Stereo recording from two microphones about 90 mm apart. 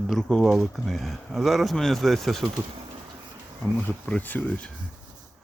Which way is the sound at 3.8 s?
20° left (ahead or behind).